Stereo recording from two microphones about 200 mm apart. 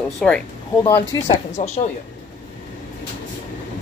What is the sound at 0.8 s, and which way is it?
Speech, 20° left (ahead or behind).